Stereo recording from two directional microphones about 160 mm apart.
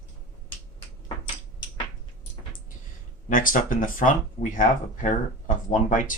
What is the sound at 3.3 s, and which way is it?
Speech, 60° left (ahead or behind).